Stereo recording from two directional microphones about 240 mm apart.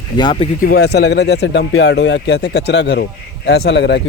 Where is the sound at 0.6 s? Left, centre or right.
Left.